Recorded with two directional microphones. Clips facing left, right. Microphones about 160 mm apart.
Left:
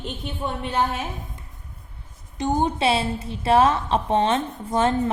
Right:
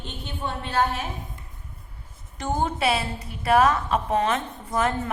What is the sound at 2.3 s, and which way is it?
A woman's voice, 20° left (ahead or behind).